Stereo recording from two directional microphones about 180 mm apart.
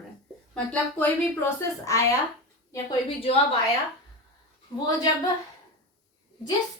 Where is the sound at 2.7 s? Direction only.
30° left (ahead or behind).